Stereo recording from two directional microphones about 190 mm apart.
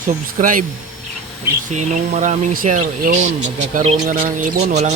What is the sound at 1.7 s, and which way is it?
Speech, 40° right (ahead or behind).